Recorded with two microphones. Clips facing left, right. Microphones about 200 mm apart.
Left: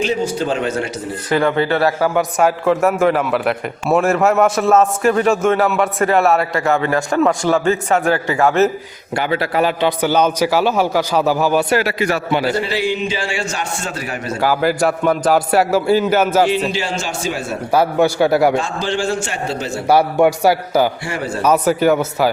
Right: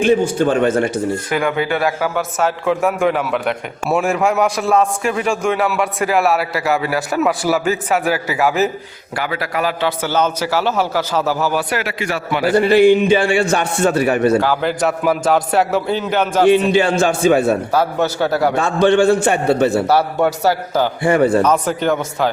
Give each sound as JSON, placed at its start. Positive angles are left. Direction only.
{"t": 0.0, "sound": "a man's voice", "side_deg": -55}
{"t": 1.3, "sound": "speech", "side_deg": -10}
{"t": 2.6, "sound": "a man's voice", "side_deg": 0}
{"t": 9.1, "sound": "a man's voice", "side_deg": 25}
{"t": 11.7, "sound": "a man's voice", "side_deg": 35}
{"t": 12.5, "sound": "a man's voice", "side_deg": -55}
{"t": 14.4, "sound": "a man's voice", "side_deg": 5}
{"t": 16.5, "sound": "a man's voice", "side_deg": -55}
{"t": 17.7, "sound": "a man's voice", "side_deg": 10}
{"t": 18.6, "sound": "a man's voice", "side_deg": -60}
{"t": 19.9, "sound": "a man's voice", "side_deg": 10}
{"t": 21.0, "sound": "a man's voice", "side_deg": -55}
{"t": 21.4, "sound": "a man's voice", "side_deg": 5}